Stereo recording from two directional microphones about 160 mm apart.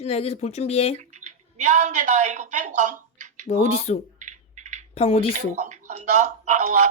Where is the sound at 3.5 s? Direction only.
40° left (ahead or behind).